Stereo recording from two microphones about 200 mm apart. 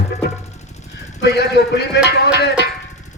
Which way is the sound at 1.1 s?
55° left (ahead or behind).